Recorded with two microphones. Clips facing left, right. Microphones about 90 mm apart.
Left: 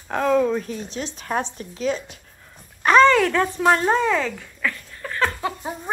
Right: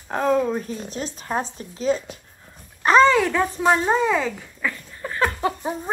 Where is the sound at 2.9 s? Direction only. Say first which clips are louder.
Left 1 dB; 5° right (ahead or behind).